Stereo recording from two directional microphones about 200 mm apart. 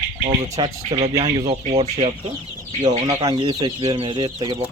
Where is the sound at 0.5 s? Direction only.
30° right (ahead or behind).